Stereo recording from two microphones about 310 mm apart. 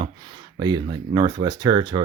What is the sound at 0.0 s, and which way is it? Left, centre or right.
Speech, centre.